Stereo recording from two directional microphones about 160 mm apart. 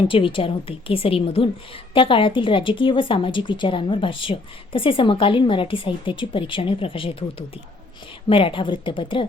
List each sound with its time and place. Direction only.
0.1 s a woman's voice: 35° left (ahead or behind)